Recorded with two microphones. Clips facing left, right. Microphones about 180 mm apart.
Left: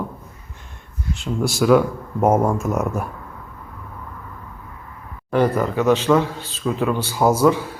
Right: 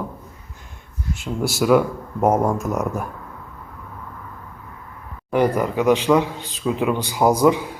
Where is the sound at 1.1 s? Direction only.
Centre (ahead or behind).